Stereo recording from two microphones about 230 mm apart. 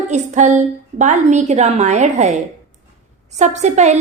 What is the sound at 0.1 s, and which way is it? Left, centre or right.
A woman's voice, right.